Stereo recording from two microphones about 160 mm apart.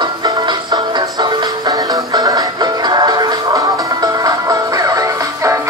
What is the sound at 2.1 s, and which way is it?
Music, 25° right (ahead or behind).